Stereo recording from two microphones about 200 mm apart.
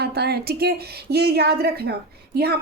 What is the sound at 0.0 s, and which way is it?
A woman's voice, 50° right (ahead or behind).